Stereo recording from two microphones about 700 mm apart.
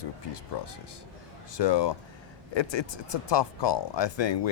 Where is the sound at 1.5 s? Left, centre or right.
Left.